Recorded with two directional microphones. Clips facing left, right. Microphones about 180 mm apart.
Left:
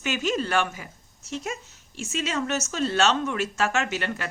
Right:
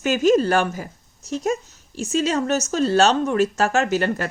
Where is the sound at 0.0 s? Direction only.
40° right (ahead or behind).